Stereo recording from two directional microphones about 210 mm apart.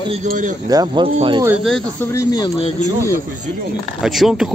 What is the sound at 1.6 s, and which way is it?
Speech, centre (ahead or behind).